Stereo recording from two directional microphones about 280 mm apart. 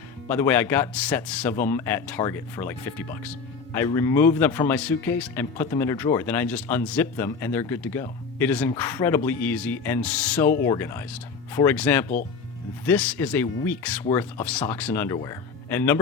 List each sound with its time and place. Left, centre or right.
0.3 s speech: centre